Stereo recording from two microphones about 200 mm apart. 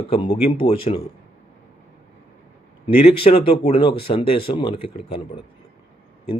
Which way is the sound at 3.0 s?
30° left (ahead or behind).